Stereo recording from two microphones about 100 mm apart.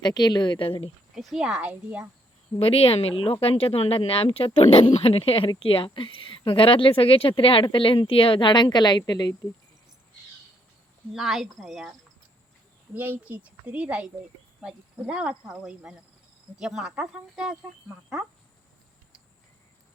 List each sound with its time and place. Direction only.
0.0 s speech: 45° left (ahead or behind)
1.1 s speech: centre (ahead or behind)
2.6 s speech: 75° left (ahead or behind); by 9.3 s 45° left (ahead or behind)
11.1 s speech: 5° right (ahead or behind)
12.9 s speech: 15° right (ahead or behind)